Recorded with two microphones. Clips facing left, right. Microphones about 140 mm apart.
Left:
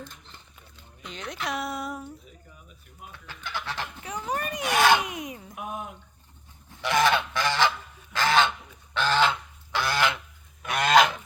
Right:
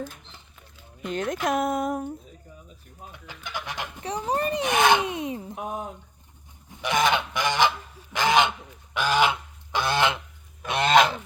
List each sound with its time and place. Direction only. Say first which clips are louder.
0.0 s speech: right 8 dB; 10° right (ahead or behind)
1.0 s speech: right 8 dB; 50° right (ahead or behind)
3.1 s speech: even; 15° right (ahead or behind)
4.3 s speech: right 4 dB; 30° right (ahead or behind)
6.7 s goose: even; 20° right (ahead or behind)